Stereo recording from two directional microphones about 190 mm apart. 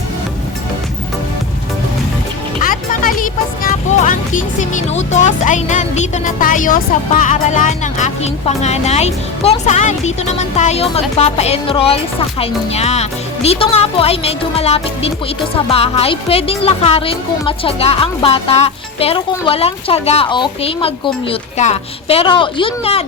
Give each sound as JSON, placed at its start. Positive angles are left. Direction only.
{"t": 2.6, "sound": "music", "side_deg": 45}
{"t": 5.1, "sound": "a woman's voice", "side_deg": 40}